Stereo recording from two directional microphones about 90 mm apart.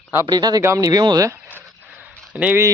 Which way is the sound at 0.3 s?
50° right (ahead or behind).